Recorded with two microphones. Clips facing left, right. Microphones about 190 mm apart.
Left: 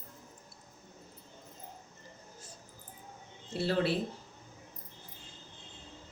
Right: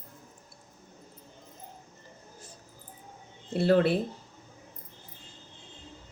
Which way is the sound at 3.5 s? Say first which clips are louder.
Right 7 dB; 55° right (ahead or behind).